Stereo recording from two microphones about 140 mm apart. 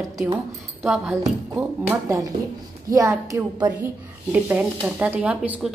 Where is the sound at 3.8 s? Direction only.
10° right (ahead or behind).